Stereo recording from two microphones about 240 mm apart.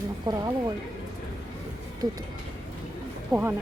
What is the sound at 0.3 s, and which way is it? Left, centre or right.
Speech, centre.